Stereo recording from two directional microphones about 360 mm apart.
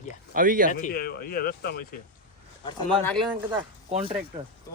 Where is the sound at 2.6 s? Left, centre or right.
Centre.